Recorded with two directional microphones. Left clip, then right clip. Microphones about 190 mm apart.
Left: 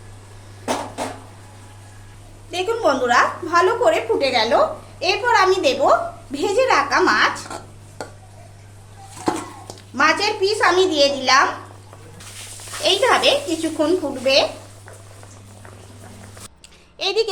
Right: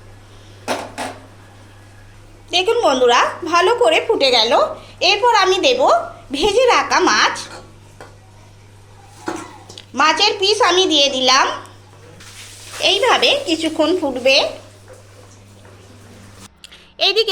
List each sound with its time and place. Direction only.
2.5 s a woman's voice: 15° right (ahead or behind)
9.7 s a sound: 15° right (ahead or behind)
10.2 s speech: 10° left (ahead or behind)
10.5 s a woman's voice: 15° right (ahead or behind)
12.8 s speech: 20° right (ahead or behind)
17.0 s a sound: 15° right (ahead or behind)